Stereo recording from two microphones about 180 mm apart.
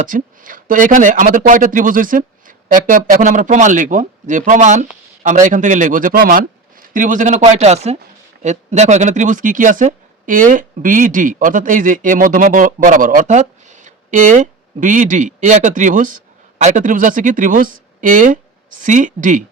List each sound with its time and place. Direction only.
0.0 s speech: 50° right (ahead or behind)